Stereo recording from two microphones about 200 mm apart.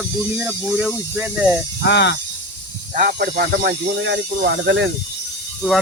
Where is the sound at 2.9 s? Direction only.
50° right (ahead or behind).